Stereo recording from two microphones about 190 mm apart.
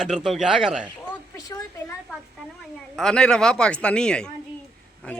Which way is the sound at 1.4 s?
20° left (ahead or behind).